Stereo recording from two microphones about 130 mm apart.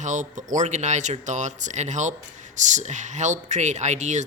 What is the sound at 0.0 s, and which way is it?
Speech, 75° right (ahead or behind).